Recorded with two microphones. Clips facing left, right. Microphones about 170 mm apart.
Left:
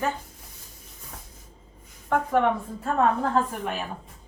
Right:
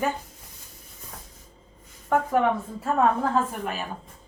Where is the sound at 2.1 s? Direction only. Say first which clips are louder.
Even; 5° right (ahead or behind).